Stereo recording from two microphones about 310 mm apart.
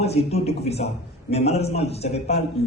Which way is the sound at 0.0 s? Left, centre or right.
Centre.